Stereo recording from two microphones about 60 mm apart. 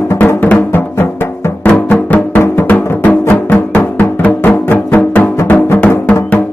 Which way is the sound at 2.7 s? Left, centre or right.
Left.